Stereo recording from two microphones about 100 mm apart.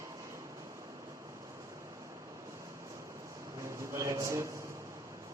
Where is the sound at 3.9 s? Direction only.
30° right (ahead or behind).